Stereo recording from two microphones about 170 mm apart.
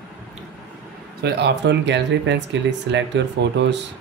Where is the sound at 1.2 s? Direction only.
85° right.